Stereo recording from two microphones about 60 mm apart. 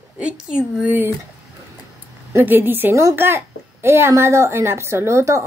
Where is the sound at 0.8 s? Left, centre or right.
Right.